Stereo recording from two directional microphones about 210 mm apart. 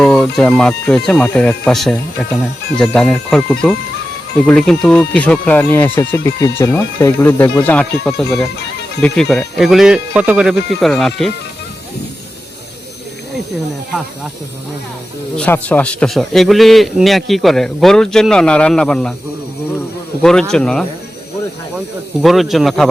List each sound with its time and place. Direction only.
0.0 s speech: centre (ahead or behind)
15.4 s speech: 10° left (ahead or behind)
20.5 s speech: 5° left (ahead or behind)
22.2 s speech: centre (ahead or behind)